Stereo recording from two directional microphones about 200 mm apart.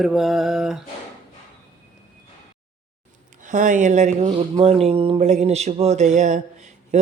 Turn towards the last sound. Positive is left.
turn(degrees=-35)  # may be behind; listen again after turning